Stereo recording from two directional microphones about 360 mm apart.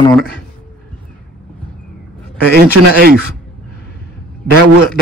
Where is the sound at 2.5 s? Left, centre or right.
Right.